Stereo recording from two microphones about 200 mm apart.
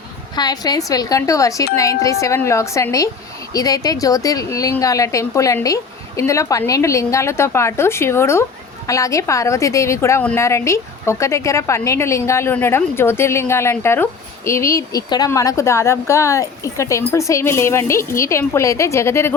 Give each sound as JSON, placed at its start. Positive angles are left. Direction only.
{"t": 0.3, "sound": "a woman's voice", "side_deg": 20}